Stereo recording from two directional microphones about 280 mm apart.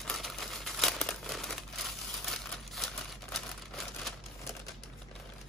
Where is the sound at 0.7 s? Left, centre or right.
Centre.